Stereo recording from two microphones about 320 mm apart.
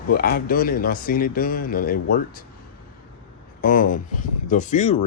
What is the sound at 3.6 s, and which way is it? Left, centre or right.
Speech, left.